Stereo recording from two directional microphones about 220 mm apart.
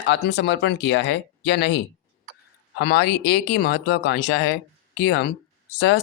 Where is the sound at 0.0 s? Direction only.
50° left (ahead or behind).